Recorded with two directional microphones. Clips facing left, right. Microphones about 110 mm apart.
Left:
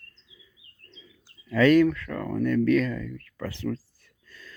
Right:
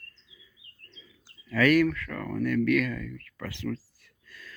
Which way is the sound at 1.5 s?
25° left (ahead or behind).